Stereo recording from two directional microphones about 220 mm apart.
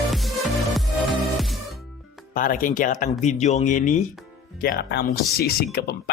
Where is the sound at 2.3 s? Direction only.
40° left (ahead or behind).